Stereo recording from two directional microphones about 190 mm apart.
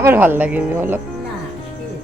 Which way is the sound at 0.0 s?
10° right (ahead or behind).